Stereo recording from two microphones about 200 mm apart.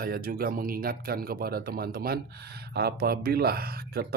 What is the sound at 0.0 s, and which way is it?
Speech, 45° right (ahead or behind).